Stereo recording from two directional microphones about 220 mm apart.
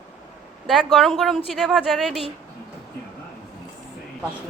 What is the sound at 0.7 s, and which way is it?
Speech, centre (ahead or behind).